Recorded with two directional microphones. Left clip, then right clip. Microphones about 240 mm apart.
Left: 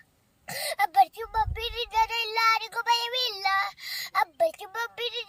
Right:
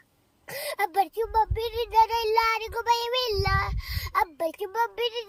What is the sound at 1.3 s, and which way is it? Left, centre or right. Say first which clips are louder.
A child's voice: right 3 dB; centre.